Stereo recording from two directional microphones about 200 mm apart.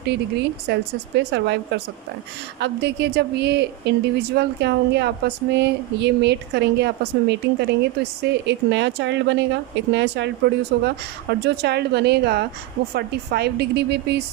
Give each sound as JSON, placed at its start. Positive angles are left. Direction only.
{"t": 0.0, "sound": "a woman's voice", "side_deg": -55}